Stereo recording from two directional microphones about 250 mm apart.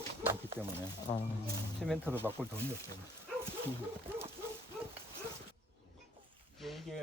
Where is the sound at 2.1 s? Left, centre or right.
Centre.